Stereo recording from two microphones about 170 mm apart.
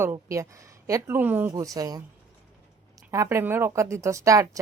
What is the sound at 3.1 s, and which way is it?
Speech, 15° right (ahead or behind).